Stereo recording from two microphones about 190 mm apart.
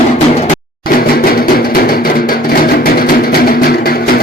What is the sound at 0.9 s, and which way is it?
Music, 50° left (ahead or behind).